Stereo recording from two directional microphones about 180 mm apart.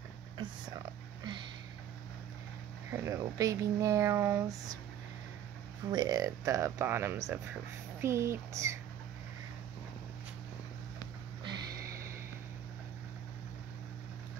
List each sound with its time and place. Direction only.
2.9 s speech: 15° right (ahead or behind)
5.9 s speech: 20° right (ahead or behind)
11.4 s a sound: 15° right (ahead or behind)